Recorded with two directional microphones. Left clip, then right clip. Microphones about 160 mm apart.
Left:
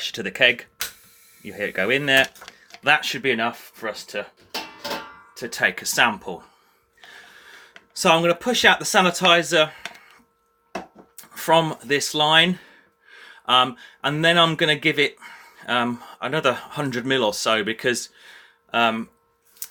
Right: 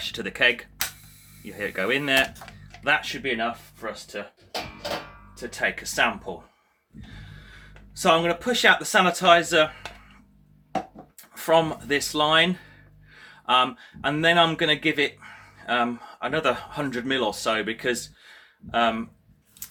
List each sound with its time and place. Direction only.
0.0 s speech: 20° left (ahead or behind)
2.8 s speech: 30° left (ahead or behind)
3.1 s speech: 50° left (ahead or behind)
5.4 s speech: 45° left (ahead or behind)
7.5 s speech: 30° left (ahead or behind)
11.2 s speech: 30° left (ahead or behind)